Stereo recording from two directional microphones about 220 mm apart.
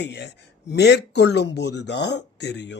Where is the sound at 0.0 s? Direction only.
50° left (ahead or behind).